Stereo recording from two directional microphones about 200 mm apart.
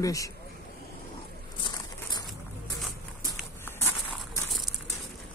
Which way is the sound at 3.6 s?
15° left (ahead or behind).